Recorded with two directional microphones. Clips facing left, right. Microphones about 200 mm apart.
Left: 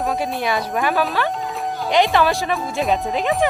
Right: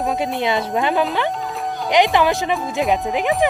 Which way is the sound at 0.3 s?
20° right (ahead or behind).